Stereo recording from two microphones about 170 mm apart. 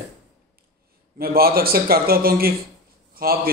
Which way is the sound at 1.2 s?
65° right (ahead or behind).